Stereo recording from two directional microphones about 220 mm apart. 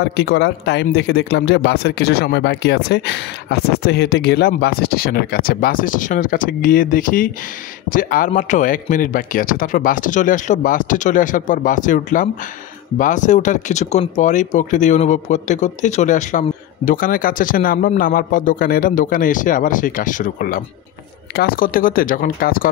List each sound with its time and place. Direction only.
0.0 s speech: 45° left (ahead or behind)